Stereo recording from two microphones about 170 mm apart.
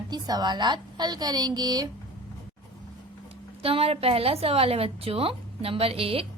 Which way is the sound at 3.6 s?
35° right (ahead or behind).